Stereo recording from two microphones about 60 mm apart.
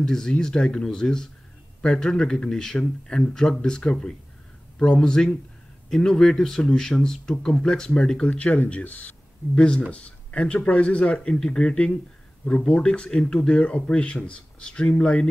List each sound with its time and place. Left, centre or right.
0.0 s speech: centre
8.3 s speech: left